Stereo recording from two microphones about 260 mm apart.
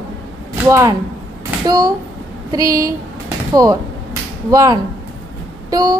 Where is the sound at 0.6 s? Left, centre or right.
Centre.